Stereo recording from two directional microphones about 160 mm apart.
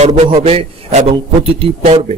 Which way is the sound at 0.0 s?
40° right (ahead or behind).